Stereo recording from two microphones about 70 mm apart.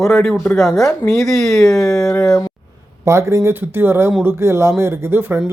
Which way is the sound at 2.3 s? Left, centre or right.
Left.